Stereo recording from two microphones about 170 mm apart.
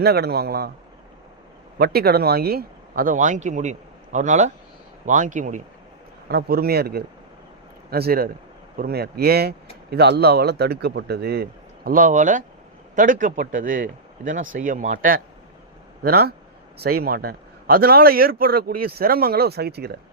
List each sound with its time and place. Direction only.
0.0 s speech: 70° right (ahead or behind)
1.8 s speech: 65° right (ahead or behind); by 5.6 s 50° right (ahead or behind)
6.2 s a man's voice: 65° right (ahead or behind)
11.9 s speech: 50° right (ahead or behind)
16.0 s a man's voice: 65° right (ahead or behind)